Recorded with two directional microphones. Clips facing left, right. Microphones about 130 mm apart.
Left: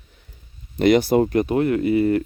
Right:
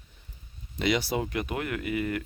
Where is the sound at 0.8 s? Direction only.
50° left (ahead or behind); by 2.2 s 30° left (ahead or behind).